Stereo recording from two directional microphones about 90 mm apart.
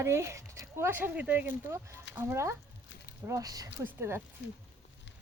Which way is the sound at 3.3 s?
40° right (ahead or behind).